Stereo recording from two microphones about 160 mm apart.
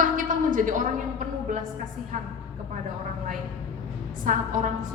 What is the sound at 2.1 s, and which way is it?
Speech, 50° right (ahead or behind).